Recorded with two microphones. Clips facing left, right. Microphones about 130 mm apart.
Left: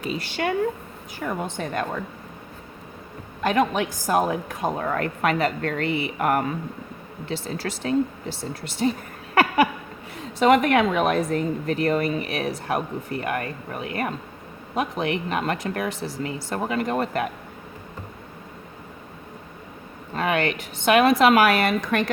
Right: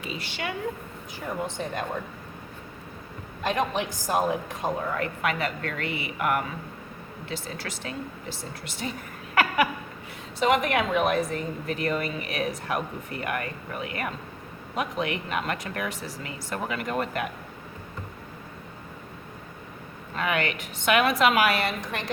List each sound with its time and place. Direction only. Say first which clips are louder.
0.0 s a woman's voice: left 7 dB; 40° left (ahead or behind)
1.2 s a woman's voice: left 3 dB; 60° left (ahead or behind)
3.4 s a woman's voice: left 5 dB; 60° left (ahead or behind); by 7.7 s 35° left (ahead or behind)
8.8 s speech: left 11 dB; 40° left (ahead or behind)
9.3 s a sound: left 4 dB; 35° left (ahead or behind)
10.4 s a woman's voice: left 6 dB; 50° left (ahead or behind); by 17.2 s 35° left (ahead or behind)
20.1 s speech: left 4 dB; 35° left (ahead or behind); by 22.0 s 55° left (ahead or behind)